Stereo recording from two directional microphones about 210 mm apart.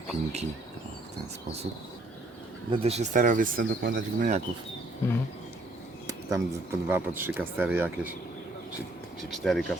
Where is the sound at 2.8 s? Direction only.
30° right (ahead or behind).